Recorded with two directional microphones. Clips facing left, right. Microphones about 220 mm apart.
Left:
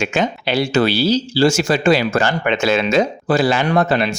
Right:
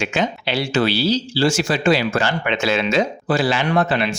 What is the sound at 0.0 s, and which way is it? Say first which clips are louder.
Speech: left 2 dB; 45° left (ahead or behind).